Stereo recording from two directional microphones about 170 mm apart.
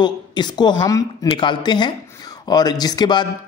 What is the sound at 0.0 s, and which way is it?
Speech, 25° left (ahead or behind).